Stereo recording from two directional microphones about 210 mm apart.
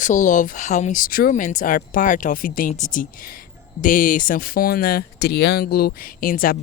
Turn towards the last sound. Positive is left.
turn(degrees=40)  # may be behind; listen again after turning